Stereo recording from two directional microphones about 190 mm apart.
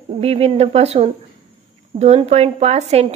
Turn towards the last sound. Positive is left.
turn(degrees=-35)  # may be behind; listen again after turning